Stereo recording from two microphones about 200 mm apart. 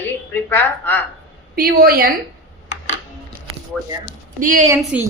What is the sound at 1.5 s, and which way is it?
Speech, 50° right (ahead or behind).